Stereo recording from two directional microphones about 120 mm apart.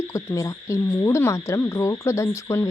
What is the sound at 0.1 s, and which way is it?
Speech, 25° left (ahead or behind).